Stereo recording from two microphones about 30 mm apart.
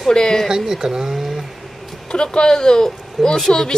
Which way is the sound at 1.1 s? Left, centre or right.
Centre.